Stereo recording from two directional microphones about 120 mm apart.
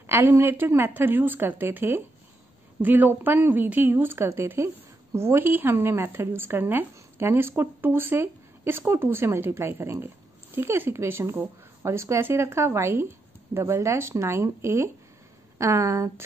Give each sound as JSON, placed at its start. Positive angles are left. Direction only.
{"t": 0.0, "sound": "a woman's voice", "side_deg": -20}